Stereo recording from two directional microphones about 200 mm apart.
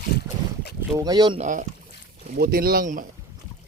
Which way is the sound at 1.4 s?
40° right (ahead or behind).